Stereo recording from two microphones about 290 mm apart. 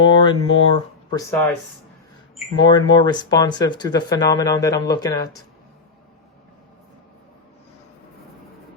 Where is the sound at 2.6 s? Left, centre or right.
Centre.